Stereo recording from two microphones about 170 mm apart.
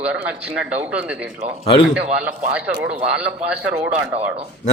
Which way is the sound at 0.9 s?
5° right (ahead or behind).